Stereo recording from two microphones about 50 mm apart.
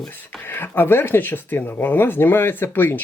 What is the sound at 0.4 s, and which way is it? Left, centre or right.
Speech, left.